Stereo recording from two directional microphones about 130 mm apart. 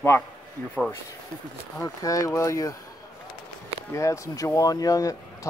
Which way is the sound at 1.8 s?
25° left (ahead or behind).